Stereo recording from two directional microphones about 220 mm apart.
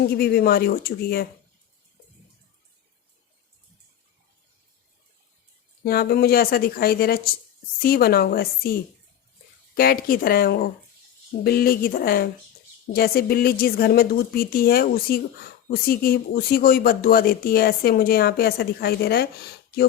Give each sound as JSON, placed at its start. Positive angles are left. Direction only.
{"t": 0.1, "sound": "speech", "side_deg": 45}
{"t": 5.8, "sound": "speech", "side_deg": 45}